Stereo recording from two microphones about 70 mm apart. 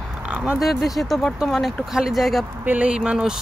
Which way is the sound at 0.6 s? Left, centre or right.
Centre.